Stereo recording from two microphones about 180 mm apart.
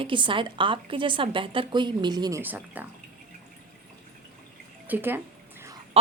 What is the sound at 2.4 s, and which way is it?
Speech, 10° right (ahead or behind).